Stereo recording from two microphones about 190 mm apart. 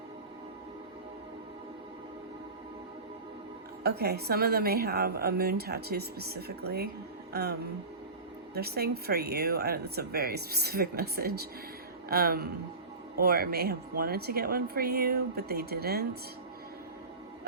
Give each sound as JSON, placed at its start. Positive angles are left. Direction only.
{"t": 3.8, "sound": "a woman's voice", "side_deg": -55}
{"t": 8.5, "sound": "a woman's voice", "side_deg": -55}